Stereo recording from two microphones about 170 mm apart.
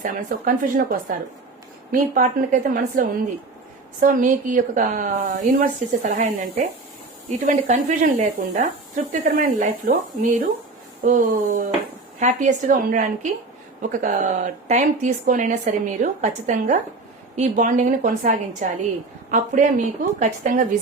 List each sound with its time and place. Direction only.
0.0 s speech: 50° right (ahead or behind)